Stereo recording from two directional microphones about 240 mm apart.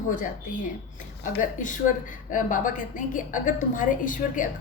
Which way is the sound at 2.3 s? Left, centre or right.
Left.